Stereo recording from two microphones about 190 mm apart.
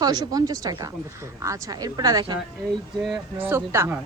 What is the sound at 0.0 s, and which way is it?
A woman's voice, 20° right (ahead or behind).